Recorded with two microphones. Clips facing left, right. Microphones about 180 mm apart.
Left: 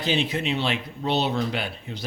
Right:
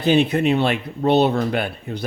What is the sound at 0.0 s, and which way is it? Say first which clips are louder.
Speech: right 8 dB; 60° right (ahead or behind).